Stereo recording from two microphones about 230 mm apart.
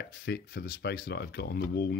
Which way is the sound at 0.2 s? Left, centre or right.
Left.